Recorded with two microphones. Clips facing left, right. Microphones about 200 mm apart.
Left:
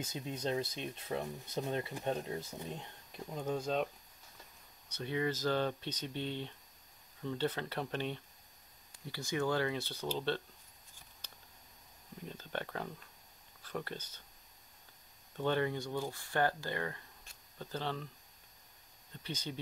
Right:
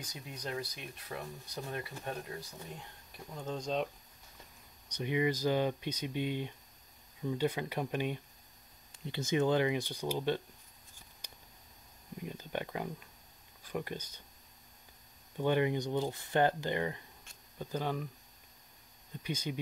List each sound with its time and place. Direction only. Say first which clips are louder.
0.0 s speech: left 5 dB; 25° left (ahead or behind)
3.5 s speech: right 1 dB; 5° left (ahead or behind)
4.8 s speech: right 4 dB; 15° right (ahead or behind)
8.9 s speech: right 5 dB; 20° right (ahead or behind)
11.2 s a sound: right 3 dB; 15° right (ahead or behind)
12.2 s speech: right 3 dB; 10° right (ahead or behind)
15.3 s speech: right 3 dB; 15° right (ahead or behind)
19.2 s speech: right 4 dB; 10° right (ahead or behind)